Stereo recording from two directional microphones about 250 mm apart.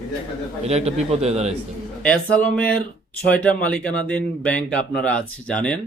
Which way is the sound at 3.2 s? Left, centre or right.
Centre.